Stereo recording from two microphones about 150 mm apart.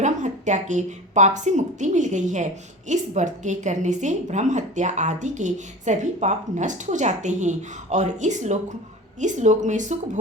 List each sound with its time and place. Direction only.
0.0 s a woman's voice: 55° right (ahead or behind)